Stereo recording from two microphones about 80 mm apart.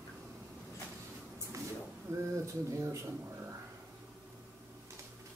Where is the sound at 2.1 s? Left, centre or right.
Right.